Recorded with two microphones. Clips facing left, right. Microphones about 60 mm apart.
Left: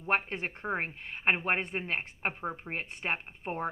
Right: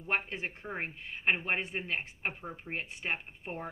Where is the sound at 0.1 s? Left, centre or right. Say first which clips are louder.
Left 3 dB; left.